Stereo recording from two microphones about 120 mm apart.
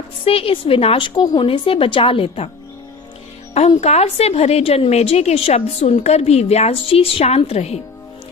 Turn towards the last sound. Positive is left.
turn(degrees=60)  # may be behind; listen again after turning